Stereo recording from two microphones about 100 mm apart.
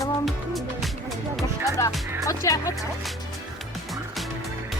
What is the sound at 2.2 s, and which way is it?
Speech, 30° left (ahead or behind).